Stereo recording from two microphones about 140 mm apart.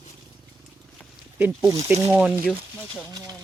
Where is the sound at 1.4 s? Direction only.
20° right (ahead or behind).